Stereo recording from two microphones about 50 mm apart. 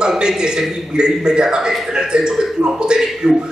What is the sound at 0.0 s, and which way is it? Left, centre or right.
A man's voice, centre.